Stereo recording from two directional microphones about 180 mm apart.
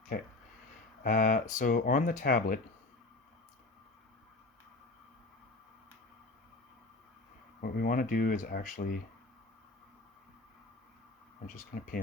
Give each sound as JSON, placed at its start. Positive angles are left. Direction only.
{"t": 1.0, "sound": "speech", "side_deg": 50}
{"t": 7.6, "sound": "speech", "side_deg": 55}
{"t": 11.4, "sound": "speech", "side_deg": 50}